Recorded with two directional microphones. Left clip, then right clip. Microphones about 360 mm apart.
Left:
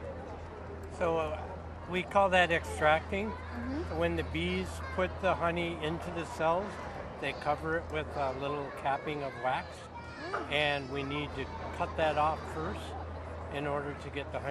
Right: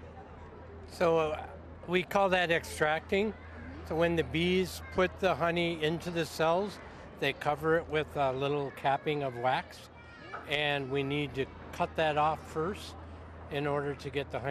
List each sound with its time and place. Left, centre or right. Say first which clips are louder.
0.9 s speech: right 4 dB; right